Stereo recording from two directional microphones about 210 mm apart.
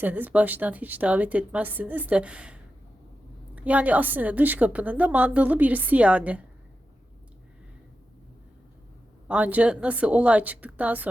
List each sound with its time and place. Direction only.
0.0 s a woman's voice: 10° right (ahead or behind)
9.2 s a woman's voice: 5° right (ahead or behind)